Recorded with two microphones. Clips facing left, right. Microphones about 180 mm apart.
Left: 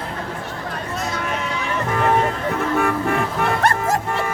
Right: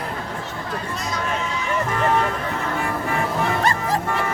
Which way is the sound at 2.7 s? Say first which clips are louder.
Left 6 dB; 55° left (ahead or behind).